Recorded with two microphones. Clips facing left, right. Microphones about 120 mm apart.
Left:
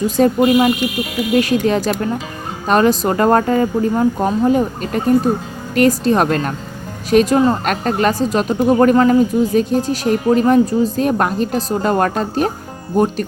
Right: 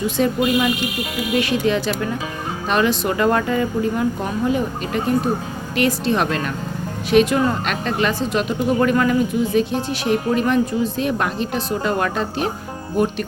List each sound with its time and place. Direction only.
0.2 s speech: 40° left (ahead or behind)